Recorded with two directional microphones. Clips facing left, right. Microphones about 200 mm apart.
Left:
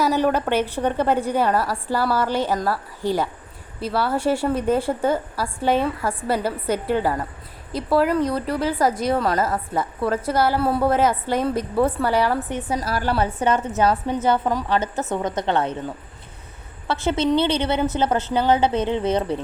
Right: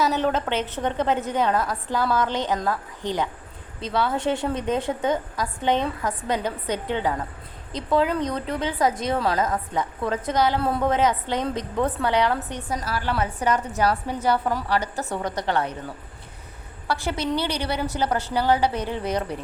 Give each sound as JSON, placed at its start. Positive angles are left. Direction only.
{"t": 0.0, "sound": "a woman's voice", "side_deg": 10}
{"t": 12.7, "sound": "a woman's voice", "side_deg": 40}
{"t": 13.2, "sound": "a woman's voice", "side_deg": 25}
{"t": 16.9, "sound": "a woman's voice", "side_deg": 25}